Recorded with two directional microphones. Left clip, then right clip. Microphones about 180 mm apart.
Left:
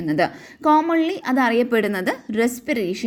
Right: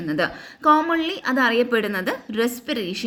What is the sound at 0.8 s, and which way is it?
A woman's voice, 30° left (ahead or behind).